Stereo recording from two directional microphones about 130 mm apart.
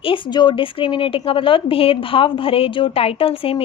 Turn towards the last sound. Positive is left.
turn(degrees=45)  # may be behind; listen again after turning